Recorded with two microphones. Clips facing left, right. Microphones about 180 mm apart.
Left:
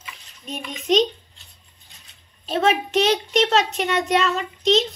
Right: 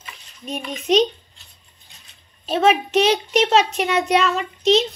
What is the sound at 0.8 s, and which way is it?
Speech, centre (ahead or behind).